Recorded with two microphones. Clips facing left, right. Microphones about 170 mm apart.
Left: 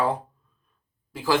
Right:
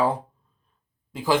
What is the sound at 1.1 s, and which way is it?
Speech, 15° right (ahead or behind).